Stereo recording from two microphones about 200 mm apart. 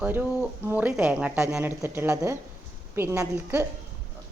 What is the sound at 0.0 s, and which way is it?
A woman's voice, 10° right (ahead or behind).